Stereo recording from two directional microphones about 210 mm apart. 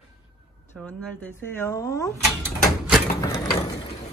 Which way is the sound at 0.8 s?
5° left (ahead or behind).